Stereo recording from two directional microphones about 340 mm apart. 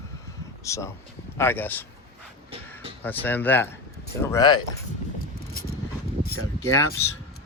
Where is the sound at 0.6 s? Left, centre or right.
Centre.